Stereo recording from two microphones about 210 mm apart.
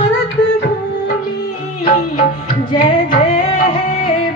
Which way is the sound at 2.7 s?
40° left (ahead or behind).